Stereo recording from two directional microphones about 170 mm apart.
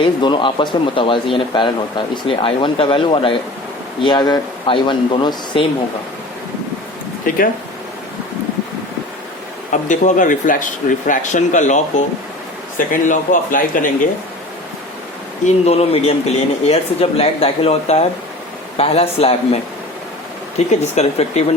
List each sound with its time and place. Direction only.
0.0 s speech: 30° left (ahead or behind)
7.3 s speech: 55° left (ahead or behind)
9.9 s speech: 45° left (ahead or behind)
15.4 s speech: 40° left (ahead or behind)
20.8 s speech: 40° left (ahead or behind)